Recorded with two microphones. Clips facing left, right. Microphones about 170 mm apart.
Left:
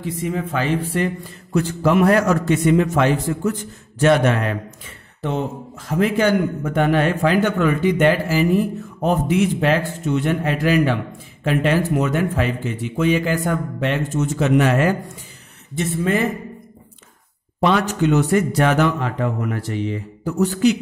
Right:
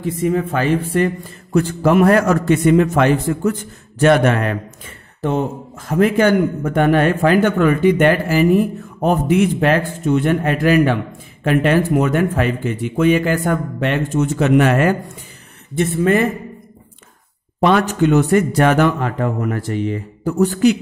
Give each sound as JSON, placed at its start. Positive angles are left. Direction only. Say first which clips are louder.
{"t": 0.0, "sound": "a man's voice", "louder": "right 6 dB", "side_deg": -50}
{"t": 17.6, "sound": "a man's voice", "louder": "right 3 dB", "side_deg": -55}